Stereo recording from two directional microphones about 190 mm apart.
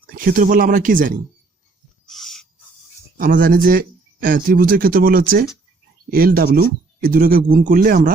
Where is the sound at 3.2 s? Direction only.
45° right (ahead or behind).